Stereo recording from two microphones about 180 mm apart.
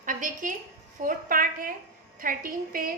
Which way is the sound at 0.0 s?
45° right (ahead or behind).